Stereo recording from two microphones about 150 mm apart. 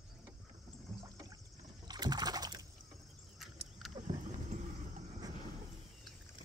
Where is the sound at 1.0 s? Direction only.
25° right (ahead or behind).